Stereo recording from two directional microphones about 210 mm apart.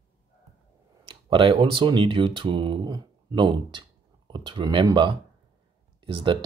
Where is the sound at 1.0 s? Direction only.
25° right (ahead or behind).